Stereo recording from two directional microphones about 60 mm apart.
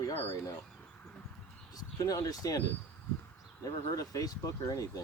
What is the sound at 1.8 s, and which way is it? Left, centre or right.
Speech, left.